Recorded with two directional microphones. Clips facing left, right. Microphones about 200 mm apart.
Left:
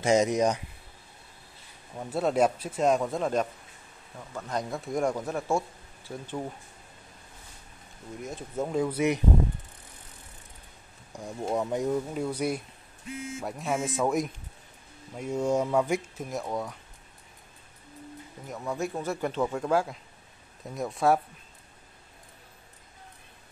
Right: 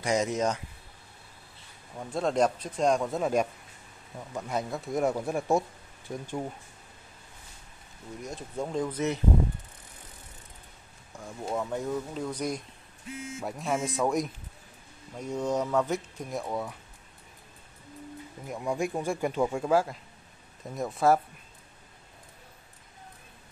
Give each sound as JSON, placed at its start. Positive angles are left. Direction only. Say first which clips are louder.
{"t": 0.0, "sound": "speech", "louder": "left 4 dB", "side_deg": 20}
{"t": 2.0, "sound": "speech", "louder": "left 1 dB", "side_deg": 5}
{"t": 4.6, "sound": "speech", "louder": "even", "side_deg": 0}
{"t": 8.2, "sound": "speech", "louder": "left 2 dB", "side_deg": 0}
{"t": 11.1, "sound": "speech", "louder": "left 3 dB", "side_deg": 15}
{"t": 16.3, "sound": "speech", "louder": "even", "side_deg": 0}
{"t": 18.5, "sound": "speech", "louder": "right 2 dB", "side_deg": -15}